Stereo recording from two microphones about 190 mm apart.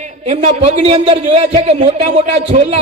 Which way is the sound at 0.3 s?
35° right (ahead or behind).